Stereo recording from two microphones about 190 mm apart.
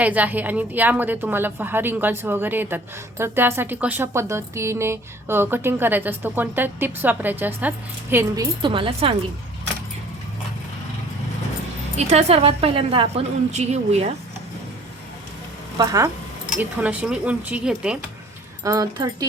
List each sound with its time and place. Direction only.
0.0 s a woman's voice: 10° right (ahead or behind)
8.6 s speech: 25° right (ahead or behind)
11.9 s a woman's voice: 35° right (ahead or behind)
15.8 s speech: 20° right (ahead or behind)
16.5 s a woman's voice: 5° right (ahead or behind)
18.6 s speech: 20° right (ahead or behind)